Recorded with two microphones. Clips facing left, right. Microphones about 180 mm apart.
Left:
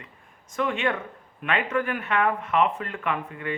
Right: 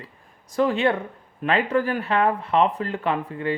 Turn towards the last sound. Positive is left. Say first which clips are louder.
# right 5 dB
turn(degrees=-30)  # may be behind; listen again after turning